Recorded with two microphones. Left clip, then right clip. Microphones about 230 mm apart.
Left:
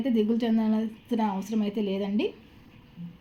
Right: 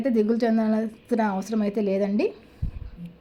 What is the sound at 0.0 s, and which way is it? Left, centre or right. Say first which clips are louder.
A woman's voice: right 4 dB; centre.